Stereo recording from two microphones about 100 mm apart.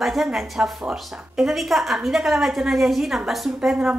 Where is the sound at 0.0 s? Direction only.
Centre (ahead or behind).